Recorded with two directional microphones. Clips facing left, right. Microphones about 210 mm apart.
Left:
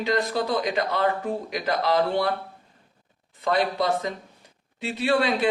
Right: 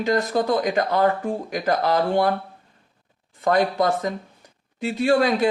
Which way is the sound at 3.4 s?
45° right (ahead or behind).